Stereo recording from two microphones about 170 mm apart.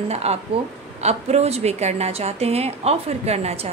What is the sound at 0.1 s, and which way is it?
A woman's voice, 40° right (ahead or behind).